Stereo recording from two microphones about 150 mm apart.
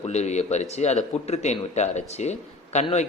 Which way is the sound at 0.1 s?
50° left (ahead or behind).